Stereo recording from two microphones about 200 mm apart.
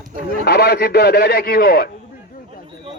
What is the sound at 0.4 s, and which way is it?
A man's voice, 50° left (ahead or behind).